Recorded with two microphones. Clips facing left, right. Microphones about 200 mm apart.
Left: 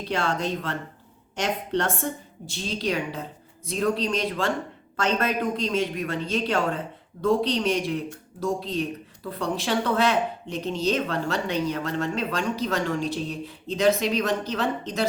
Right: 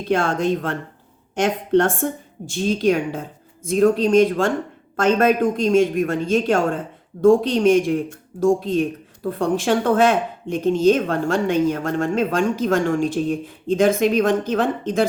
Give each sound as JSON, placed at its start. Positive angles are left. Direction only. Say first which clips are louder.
{"t": 0.1, "sound": "speech", "louder": "right 7 dB", "side_deg": -50}